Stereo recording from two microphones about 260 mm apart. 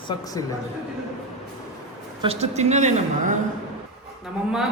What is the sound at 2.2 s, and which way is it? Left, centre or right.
A woman's voice, right.